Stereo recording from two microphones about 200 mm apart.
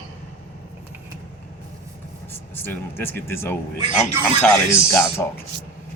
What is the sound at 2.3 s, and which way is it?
Speech, 10° left (ahead or behind).